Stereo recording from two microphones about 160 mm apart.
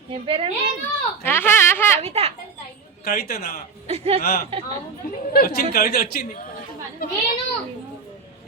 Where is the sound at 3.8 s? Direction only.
40° right (ahead or behind).